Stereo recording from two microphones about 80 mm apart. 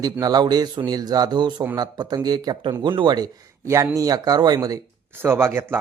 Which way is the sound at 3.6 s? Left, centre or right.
Right.